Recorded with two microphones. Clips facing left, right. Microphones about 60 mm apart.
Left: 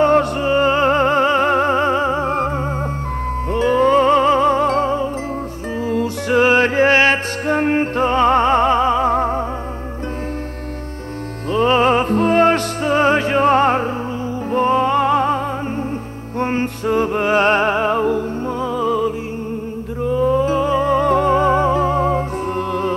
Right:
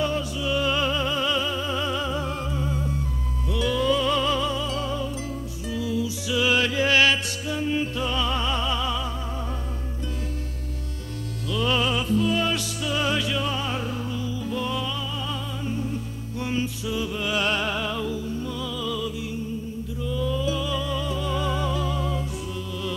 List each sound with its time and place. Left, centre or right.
0.0 s music: left
0.5 s music: left
9.1 s music: left
11.5 s music: left